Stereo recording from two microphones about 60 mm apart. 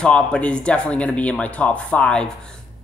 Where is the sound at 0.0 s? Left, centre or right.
Centre.